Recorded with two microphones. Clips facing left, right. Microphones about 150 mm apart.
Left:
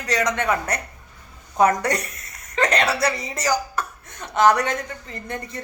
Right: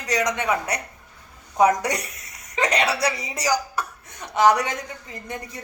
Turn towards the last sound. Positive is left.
turn(degrees=-10)  # may be behind; listen again after turning